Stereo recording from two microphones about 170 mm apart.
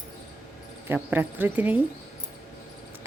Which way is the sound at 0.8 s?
10° right (ahead or behind).